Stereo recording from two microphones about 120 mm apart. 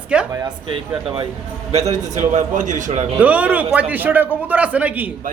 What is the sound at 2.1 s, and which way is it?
Speech, 85° right.